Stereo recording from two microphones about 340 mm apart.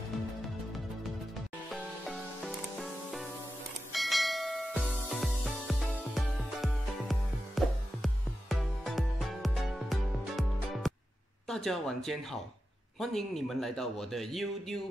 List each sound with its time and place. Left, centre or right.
1.7 s music: centre
3.9 s church bell: centre
11.4 s a man's voice: centre